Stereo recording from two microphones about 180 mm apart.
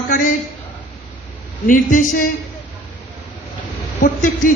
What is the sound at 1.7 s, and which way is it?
Speech, 45° left (ahead or behind).